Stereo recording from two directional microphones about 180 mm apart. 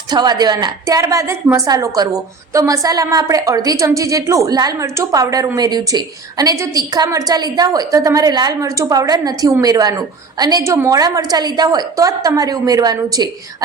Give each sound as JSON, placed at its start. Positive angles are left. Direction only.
{"t": 0.1, "sound": "a woman's voice", "side_deg": -20}